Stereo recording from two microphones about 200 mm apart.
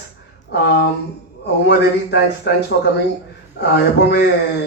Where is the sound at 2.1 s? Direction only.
55° left (ahead or behind).